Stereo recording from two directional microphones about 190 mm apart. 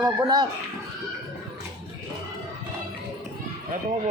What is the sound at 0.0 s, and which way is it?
Speech, 20° right (ahead or behind).